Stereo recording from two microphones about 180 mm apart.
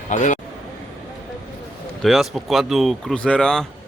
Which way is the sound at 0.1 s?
45° left (ahead or behind).